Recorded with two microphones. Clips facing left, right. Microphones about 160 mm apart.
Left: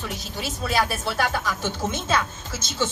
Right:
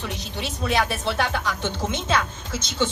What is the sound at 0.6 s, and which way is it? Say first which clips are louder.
Speech: right 1 dB; 20° right (ahead or behind).